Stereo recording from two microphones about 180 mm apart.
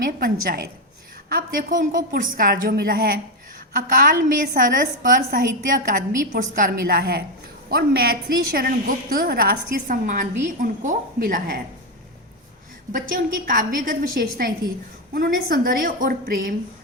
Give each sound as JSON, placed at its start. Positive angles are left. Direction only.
{"t": 0.0, "sound": "a woman's voice", "side_deg": -55}
{"t": 13.5, "sound": "a woman's voice", "side_deg": -50}